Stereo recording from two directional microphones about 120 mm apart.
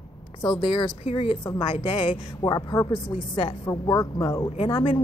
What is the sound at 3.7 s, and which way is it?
Speech, 25° left (ahead or behind).